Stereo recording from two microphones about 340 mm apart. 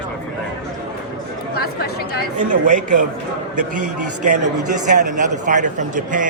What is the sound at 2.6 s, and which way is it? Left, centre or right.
Speech, right.